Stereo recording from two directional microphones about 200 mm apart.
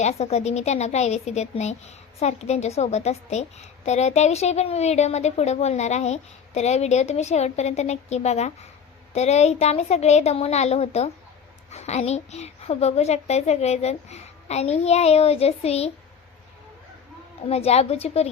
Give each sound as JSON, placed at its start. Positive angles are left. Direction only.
{"t": 0.0, "sound": "a woman's voice", "side_deg": 30}
{"t": 17.5, "sound": "a woman's voice", "side_deg": 30}